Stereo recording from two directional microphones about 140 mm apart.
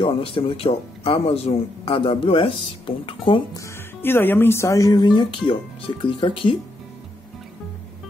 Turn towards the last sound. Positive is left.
turn(degrees=35)  # may be behind; listen again after turning